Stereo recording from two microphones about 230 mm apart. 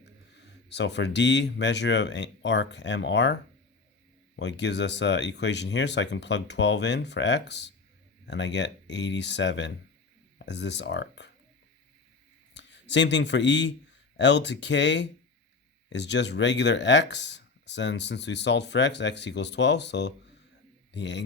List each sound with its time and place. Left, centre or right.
0.7 s speech: left
4.4 s speech: left
12.5 s a man's voice: left